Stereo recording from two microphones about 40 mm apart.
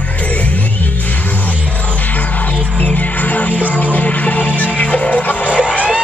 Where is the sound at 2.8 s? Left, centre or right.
Left.